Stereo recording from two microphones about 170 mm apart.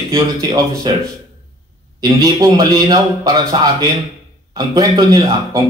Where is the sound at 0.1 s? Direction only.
20° right (ahead or behind).